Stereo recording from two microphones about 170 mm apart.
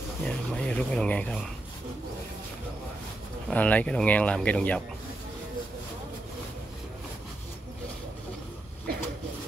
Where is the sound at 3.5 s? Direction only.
10° left (ahead or behind).